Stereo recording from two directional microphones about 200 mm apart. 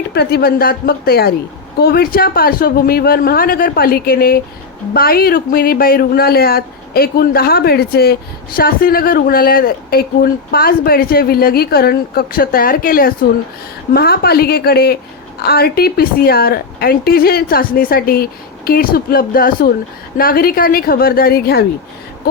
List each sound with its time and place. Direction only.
0.1 s a woman's voice: 55° left (ahead or behind)